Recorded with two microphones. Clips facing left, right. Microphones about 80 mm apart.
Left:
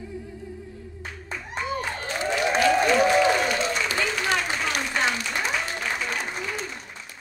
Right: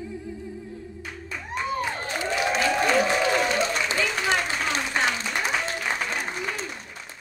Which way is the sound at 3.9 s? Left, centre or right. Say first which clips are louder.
Even; right.